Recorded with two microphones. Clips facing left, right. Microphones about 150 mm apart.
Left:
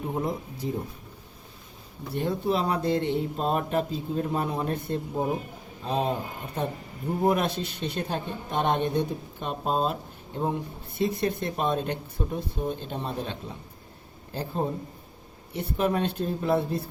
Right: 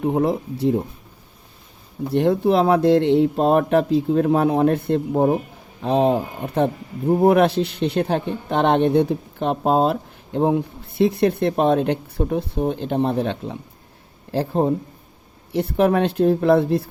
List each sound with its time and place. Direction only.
0.0 s speech: 70° right (ahead or behind)
2.1 s speech: 75° right (ahead or behind)